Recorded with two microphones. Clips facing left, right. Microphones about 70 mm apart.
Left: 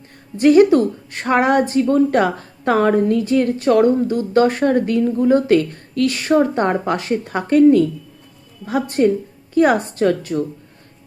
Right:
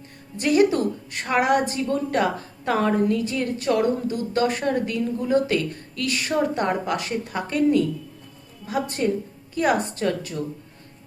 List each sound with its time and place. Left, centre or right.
0.3 s a woman's voice: left